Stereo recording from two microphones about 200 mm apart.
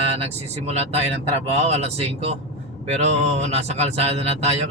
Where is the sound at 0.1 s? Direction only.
30° right (ahead or behind).